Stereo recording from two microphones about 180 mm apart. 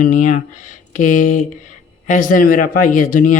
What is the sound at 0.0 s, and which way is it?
A man's voice, 45° left (ahead or behind).